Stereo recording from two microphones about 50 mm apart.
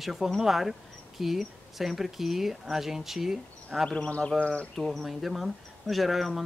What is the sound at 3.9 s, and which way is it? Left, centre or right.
Speech, centre.